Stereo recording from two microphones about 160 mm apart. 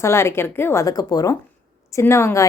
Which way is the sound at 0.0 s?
15° left (ahead or behind).